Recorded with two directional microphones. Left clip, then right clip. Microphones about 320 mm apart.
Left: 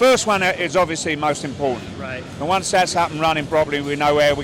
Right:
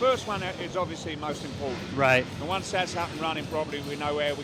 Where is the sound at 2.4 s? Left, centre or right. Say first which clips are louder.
Left 11 dB; left.